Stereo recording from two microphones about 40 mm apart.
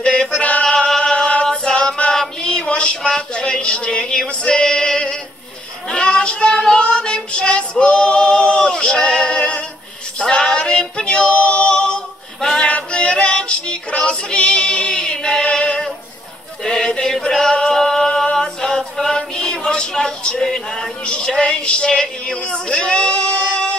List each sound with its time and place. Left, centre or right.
0.0 s chant: left
2.4 s a sound: left
5.9 s child singing: left
7.8 s male singing: left
10.2 s female singing: left
12.5 s music: left
16.6 s a sound: centre
17.2 s male singing: centre
17.8 s a sound: centre
21.0 s speech: left